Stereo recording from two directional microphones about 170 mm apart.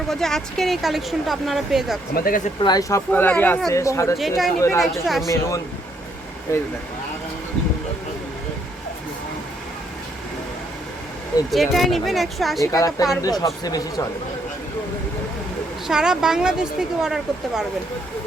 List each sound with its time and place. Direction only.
0.1 s speech: centre (ahead or behind)
2.1 s speech: 60° left (ahead or behind)
2.6 s speech: 25° left (ahead or behind)
3.1 s speech: 10° left (ahead or behind)
4.2 s speech: centre (ahead or behind)
11.5 s speech: centre (ahead or behind)
12.7 s speech: 20° left (ahead or behind)
15.9 s speech: 5° right (ahead or behind)